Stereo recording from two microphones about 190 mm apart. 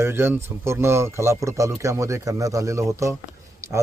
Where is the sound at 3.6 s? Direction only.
15° right (ahead or behind).